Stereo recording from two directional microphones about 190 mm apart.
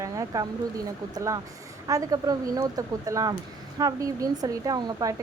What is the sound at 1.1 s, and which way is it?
A woman's voice, 15° right (ahead or behind).